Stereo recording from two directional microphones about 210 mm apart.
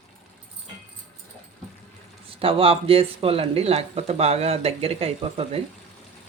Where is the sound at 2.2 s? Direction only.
25° right (ahead or behind).